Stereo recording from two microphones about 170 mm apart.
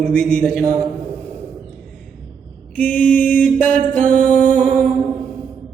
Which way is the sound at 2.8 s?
5° left (ahead or behind).